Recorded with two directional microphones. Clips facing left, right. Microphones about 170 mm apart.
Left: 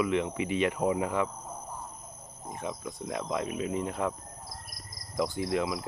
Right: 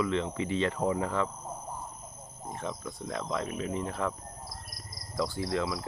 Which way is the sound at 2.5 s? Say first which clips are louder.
Left 1 dB; 15° left (ahead or behind).